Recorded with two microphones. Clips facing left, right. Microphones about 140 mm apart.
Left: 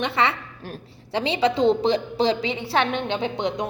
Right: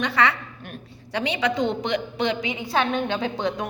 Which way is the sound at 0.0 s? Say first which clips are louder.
Even; 25° left (ahead or behind).